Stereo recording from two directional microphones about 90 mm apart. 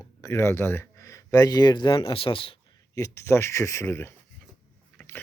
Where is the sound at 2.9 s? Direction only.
35° left (ahead or behind).